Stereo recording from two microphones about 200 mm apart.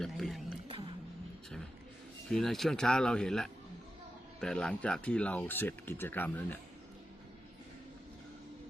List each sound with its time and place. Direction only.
0.0 s a sound: centre (ahead or behind)
0.7 s music: 25° right (ahead or behind)
2.3 s speech: centre (ahead or behind)